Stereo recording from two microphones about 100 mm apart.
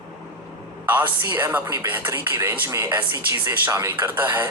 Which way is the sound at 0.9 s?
20° right (ahead or behind).